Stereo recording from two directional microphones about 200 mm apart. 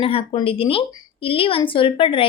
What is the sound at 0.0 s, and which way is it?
A woman's voice, 30° left (ahead or behind).